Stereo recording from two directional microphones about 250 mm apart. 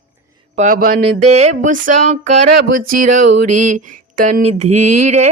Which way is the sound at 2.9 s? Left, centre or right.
Right.